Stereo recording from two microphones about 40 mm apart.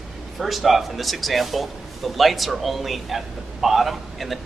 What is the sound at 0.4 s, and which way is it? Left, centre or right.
A man's voice, centre.